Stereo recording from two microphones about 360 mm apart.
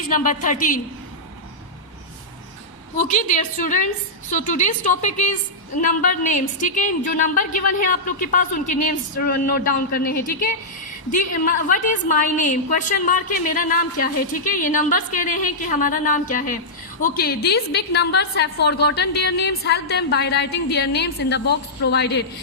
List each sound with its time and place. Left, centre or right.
0.1 s a woman's voice: left
3.0 s a woman's voice: left